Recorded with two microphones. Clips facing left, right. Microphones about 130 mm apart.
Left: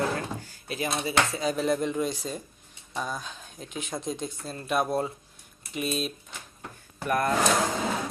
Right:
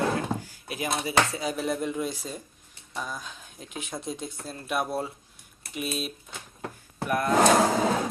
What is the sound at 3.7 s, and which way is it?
Speech, 5° right (ahead or behind).